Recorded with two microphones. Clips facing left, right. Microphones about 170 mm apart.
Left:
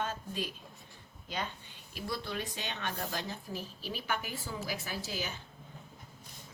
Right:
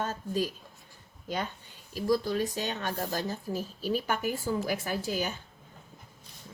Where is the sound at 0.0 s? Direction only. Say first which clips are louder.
Right 6 dB; 40° right (ahead or behind).